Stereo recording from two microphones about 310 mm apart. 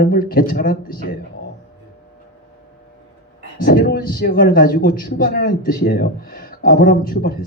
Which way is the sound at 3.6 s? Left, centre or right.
Left.